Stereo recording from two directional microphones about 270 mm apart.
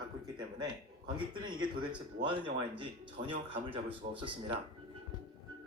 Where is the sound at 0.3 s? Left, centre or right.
Centre.